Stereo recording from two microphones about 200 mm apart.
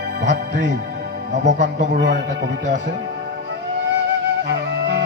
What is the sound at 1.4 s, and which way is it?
Speech, 35° right (ahead or behind).